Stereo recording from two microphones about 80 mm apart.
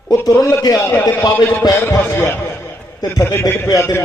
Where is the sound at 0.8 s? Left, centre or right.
Left.